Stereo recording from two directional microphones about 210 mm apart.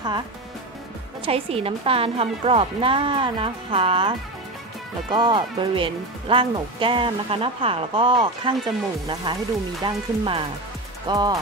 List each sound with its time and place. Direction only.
1.2 s speech: 25° right (ahead or behind)
5.1 s speech: 20° right (ahead or behind)